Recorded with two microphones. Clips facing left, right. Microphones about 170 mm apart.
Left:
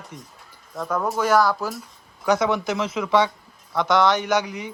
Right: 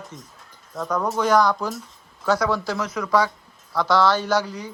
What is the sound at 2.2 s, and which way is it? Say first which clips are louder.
A man's voice: left 1 dB; 20° left (ahead or behind).